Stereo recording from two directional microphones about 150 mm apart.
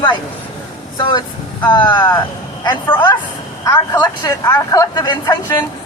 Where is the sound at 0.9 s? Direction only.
30° left (ahead or behind).